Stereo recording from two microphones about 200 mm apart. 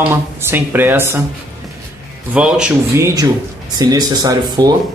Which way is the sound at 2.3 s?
5° right (ahead or behind).